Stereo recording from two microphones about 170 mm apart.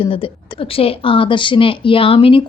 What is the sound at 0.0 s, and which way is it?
Speech, 30° left (ahead or behind).